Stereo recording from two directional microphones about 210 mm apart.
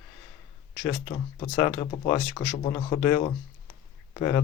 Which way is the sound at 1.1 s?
25° left (ahead or behind).